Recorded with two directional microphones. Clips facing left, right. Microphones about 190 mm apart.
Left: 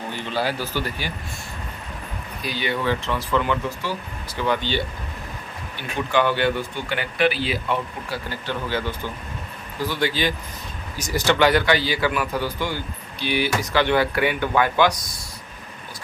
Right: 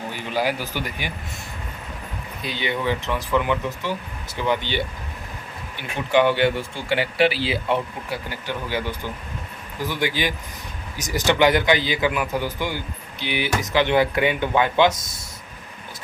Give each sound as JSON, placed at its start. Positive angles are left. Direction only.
{"t": 0.1, "sound": "speech", "side_deg": -10}
{"t": 2.4, "sound": "a man's voice", "side_deg": -20}
{"t": 8.3, "sound": "a man's voice", "side_deg": -15}